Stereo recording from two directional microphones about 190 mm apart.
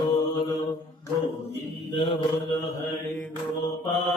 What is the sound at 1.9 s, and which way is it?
Mantra, 30° left (ahead or behind).